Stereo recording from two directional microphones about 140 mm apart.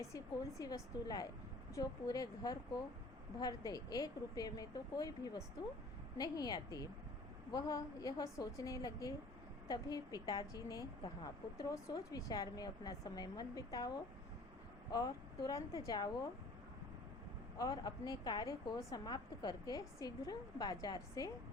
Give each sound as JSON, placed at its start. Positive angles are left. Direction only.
{"t": 0.6, "sound": "a woman's voice", "side_deg": 30}
{"t": 17.6, "sound": "a woman's voice", "side_deg": 30}